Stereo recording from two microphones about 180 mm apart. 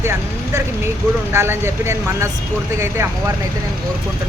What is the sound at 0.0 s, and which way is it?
Speech, 15° right (ahead or behind).